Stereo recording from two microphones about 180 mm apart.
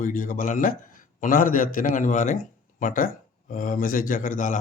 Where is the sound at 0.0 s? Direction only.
45° left (ahead or behind).